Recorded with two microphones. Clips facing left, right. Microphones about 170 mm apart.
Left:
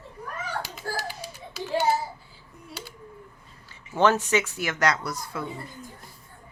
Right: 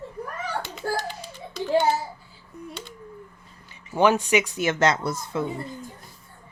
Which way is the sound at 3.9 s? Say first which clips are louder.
Right 2 dB; 15° right (ahead or behind).